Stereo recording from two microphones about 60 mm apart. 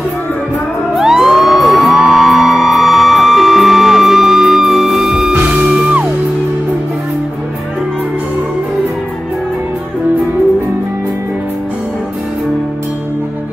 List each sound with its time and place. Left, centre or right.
0.9 s music: centre
5.7 s music: right